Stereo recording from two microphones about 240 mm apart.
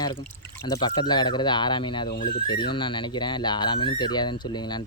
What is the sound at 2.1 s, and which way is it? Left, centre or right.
Speech, left.